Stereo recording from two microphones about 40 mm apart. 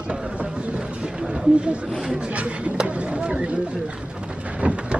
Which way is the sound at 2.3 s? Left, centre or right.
Right.